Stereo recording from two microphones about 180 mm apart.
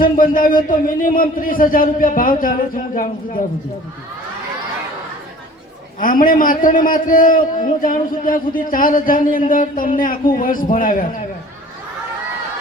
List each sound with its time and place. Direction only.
0.0 s a man's voice: 50° left (ahead or behind)
6.0 s a man's voice: 50° left (ahead or behind)